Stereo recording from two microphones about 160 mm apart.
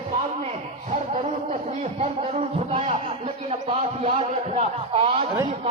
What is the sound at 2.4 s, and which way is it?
A man's voice, 40° right (ahead or behind).